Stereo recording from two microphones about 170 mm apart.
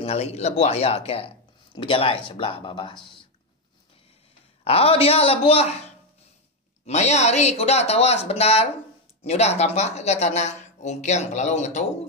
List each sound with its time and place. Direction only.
0.0 s speech: 40° left (ahead or behind)
4.6 s speech: 35° left (ahead or behind)